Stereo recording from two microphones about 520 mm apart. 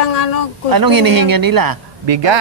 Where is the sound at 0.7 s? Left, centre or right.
Right.